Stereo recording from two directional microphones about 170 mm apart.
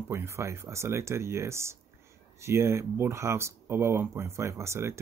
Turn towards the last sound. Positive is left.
turn(degrees=-15)  # may be behind; listen again after turning